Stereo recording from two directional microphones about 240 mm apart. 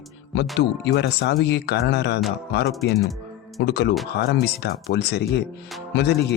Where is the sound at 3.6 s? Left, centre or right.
Left.